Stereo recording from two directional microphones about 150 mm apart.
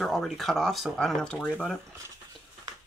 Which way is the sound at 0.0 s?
Centre (ahead or behind).